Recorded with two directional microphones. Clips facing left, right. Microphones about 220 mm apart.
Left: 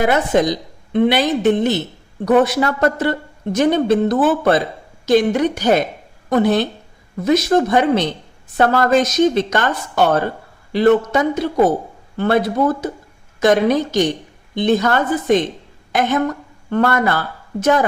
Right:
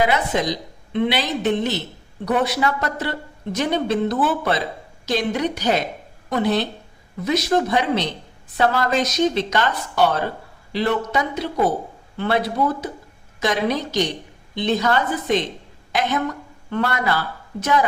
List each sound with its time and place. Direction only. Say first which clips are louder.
0.0 s a woman's voice: left 5 dB; 50° left (ahead or behind)